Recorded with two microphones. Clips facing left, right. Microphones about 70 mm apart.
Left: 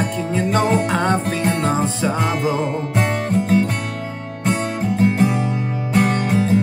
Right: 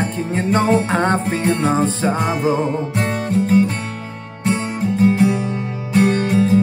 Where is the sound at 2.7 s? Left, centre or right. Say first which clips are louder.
Even; centre.